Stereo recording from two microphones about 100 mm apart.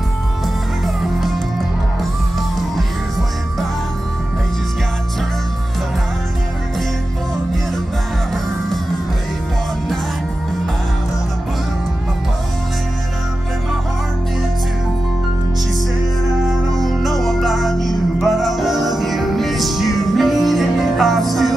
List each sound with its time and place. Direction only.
0.8 s music: centre (ahead or behind)
16.4 s music: centre (ahead or behind)